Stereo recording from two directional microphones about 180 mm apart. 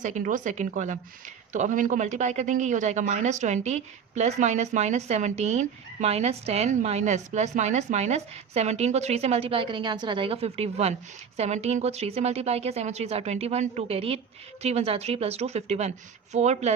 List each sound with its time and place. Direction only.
0.0 s a woman's voice: 45° right (ahead or behind)